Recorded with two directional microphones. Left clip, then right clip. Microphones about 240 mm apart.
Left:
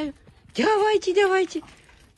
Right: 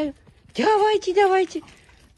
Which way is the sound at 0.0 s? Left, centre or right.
Centre.